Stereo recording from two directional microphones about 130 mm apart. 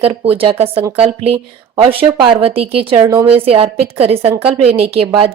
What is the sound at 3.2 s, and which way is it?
A woman's voice, 50° right (ahead or behind).